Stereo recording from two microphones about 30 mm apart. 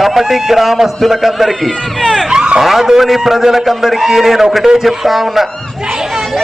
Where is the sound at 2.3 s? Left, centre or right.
Right.